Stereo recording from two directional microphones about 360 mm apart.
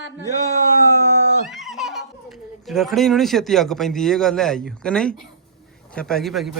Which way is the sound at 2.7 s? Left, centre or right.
Centre.